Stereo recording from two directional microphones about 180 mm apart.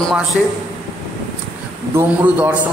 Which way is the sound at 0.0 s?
Centre (ahead or behind).